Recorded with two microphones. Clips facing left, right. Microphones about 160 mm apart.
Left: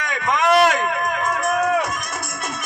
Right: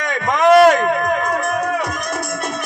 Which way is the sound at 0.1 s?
35° right (ahead or behind).